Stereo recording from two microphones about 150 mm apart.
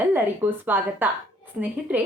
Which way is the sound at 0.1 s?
10° right (ahead or behind).